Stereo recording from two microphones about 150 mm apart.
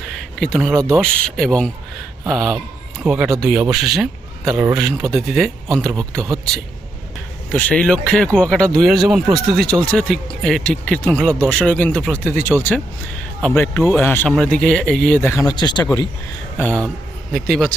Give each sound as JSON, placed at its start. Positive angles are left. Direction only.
{"t": 0.1, "sound": "a sound", "side_deg": 5}
{"t": 0.9, "sound": "speech", "side_deg": 5}
{"t": 7.5, "sound": "speech", "side_deg": 5}
{"t": 15.2, "sound": "speech", "side_deg": 20}
{"t": 16.6, "sound": "speech", "side_deg": 10}